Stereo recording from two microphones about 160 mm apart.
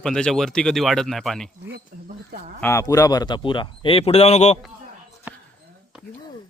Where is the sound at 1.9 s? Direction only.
55° right (ahead or behind).